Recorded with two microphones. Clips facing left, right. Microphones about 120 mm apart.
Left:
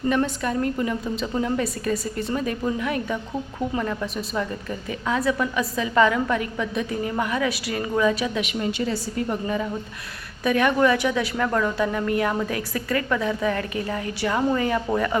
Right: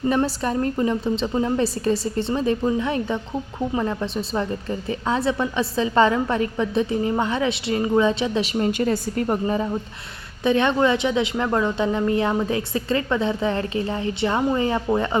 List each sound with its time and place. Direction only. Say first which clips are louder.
0.1 s a woman's voice: right 1 dB; 30° right (ahead or behind)
10.4 s a woman's voice: right 1 dB; 25° right (ahead or behind)